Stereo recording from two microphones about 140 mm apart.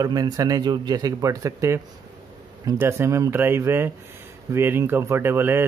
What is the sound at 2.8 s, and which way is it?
Speech, 20° right (ahead or behind).